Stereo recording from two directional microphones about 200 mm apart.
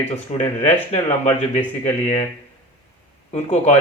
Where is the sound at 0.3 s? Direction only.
35° left (ahead or behind).